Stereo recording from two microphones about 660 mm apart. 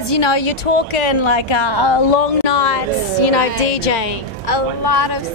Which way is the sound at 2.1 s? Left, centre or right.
Left.